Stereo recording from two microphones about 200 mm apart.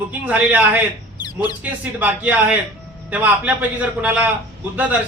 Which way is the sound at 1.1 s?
20° left (ahead or behind).